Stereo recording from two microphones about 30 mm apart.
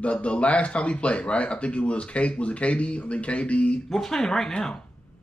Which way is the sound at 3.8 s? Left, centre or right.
Centre.